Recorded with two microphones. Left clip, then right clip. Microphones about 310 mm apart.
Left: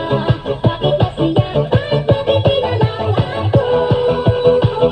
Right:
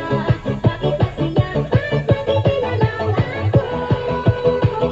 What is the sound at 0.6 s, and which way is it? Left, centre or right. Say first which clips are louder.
Music: left 5 dB; left.